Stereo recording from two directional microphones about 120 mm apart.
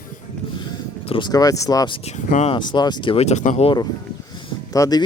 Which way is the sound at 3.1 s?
70° left (ahead or behind).